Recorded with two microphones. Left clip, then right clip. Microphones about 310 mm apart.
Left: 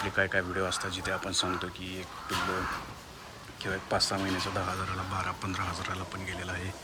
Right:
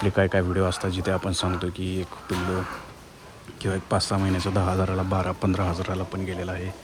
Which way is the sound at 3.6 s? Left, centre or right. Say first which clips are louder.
Right 4 dB; centre.